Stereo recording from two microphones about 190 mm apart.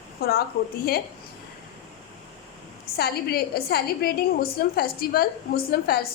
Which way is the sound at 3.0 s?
55° left (ahead or behind).